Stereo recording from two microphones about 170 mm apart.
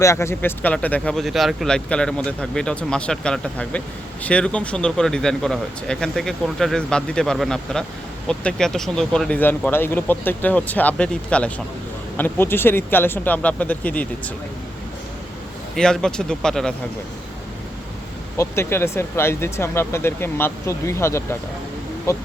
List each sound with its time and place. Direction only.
0.0 s speech: 15° left (ahead or behind)
15.7 s speech: 5° left (ahead or behind)
18.3 s speech: 15° left (ahead or behind)